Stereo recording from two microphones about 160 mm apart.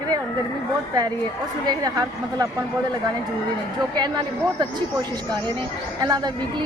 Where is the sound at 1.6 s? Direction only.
25° right (ahead or behind).